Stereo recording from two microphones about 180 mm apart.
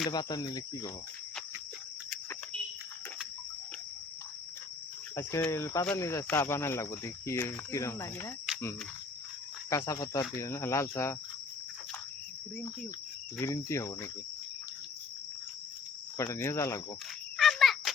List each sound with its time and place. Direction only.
0.1 s cricket: 20° left (ahead or behind)
5.1 s speech: 15° left (ahead or behind)
9.6 s speech: 15° left (ahead or behind)
13.4 s speech: 15° left (ahead or behind)
16.1 s speech: 15° left (ahead or behind)
17.3 s a sound: centre (ahead or behind)